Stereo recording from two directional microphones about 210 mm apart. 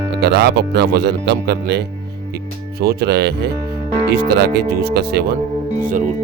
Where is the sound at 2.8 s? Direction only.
50° right (ahead or behind).